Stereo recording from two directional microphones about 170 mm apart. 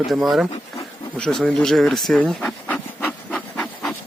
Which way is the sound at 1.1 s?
5° left (ahead or behind).